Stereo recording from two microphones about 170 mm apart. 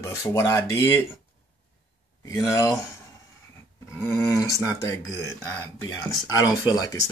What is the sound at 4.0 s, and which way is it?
Speech, 15° left (ahead or behind).